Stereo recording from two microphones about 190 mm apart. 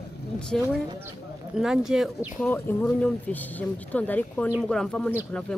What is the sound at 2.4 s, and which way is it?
A man's voice, 10° left (ahead or behind).